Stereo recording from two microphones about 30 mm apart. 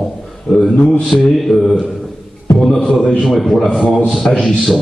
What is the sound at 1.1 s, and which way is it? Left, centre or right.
Mantra, left.